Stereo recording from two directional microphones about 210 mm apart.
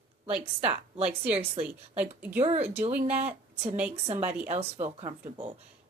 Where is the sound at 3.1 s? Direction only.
30° right (ahead or behind).